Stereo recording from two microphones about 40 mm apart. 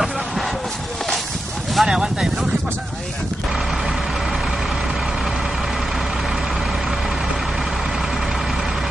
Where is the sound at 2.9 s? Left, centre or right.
Centre.